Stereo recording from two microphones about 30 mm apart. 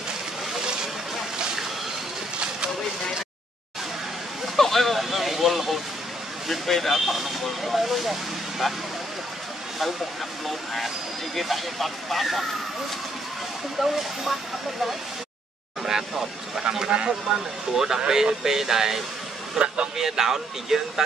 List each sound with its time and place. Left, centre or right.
4.6 s a sound: centre
6.7 s speech: centre
10.4 s speech: centre
13.7 s speech: centre
15.8 s speech: centre
19.6 s a sound: centre
20.0 s speech: centre